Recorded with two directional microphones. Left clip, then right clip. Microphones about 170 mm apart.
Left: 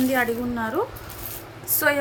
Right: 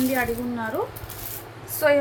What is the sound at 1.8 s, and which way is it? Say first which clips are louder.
Speech: right 2 dB; 45° left (ahead or behind).